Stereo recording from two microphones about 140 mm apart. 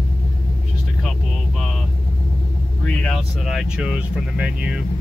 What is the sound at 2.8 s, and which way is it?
Speech, 5° left (ahead or behind).